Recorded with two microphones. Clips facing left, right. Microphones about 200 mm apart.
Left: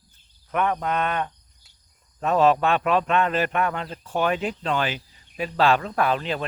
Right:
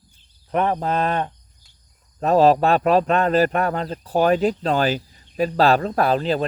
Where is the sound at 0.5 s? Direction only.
35° right (ahead or behind).